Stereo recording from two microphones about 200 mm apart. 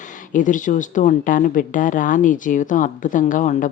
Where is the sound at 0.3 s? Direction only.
40° left (ahead or behind).